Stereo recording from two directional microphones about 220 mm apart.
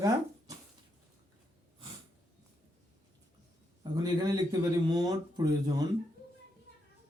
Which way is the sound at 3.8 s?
15° right (ahead or behind).